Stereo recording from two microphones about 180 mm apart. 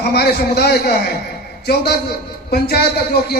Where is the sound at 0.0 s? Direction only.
60° left (ahead or behind).